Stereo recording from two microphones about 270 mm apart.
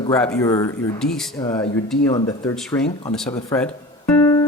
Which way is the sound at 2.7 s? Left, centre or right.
Centre.